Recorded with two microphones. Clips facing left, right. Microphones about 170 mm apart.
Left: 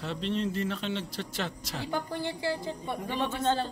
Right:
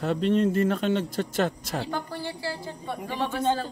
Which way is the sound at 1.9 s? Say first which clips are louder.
Even; 20° left (ahead or behind).